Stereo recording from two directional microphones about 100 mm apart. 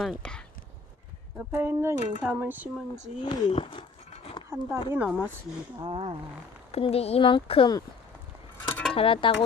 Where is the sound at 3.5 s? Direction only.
65° left (ahead or behind).